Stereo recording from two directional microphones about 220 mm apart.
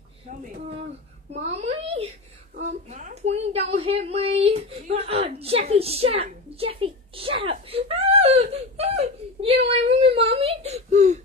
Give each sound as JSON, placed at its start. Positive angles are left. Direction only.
{"t": 0.3, "sound": "a woman's voice", "side_deg": -35}